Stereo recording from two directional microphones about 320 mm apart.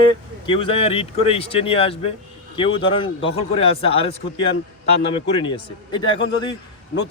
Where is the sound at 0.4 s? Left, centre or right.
Centre.